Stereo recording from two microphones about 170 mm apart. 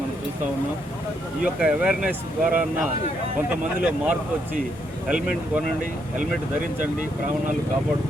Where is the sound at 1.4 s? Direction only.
5° right (ahead or behind).